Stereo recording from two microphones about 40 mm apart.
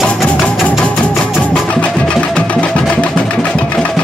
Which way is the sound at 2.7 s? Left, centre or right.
Left.